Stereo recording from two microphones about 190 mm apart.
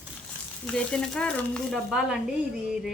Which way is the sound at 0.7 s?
5° left (ahead or behind).